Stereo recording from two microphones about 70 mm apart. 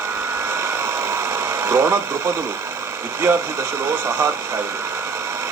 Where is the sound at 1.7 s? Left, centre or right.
Right.